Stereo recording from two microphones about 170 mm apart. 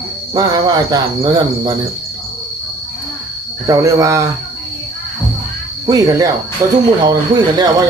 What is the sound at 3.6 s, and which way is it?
Speech, 20° right (ahead or behind).